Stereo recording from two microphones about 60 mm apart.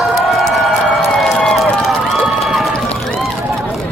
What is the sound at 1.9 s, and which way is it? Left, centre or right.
Run, centre.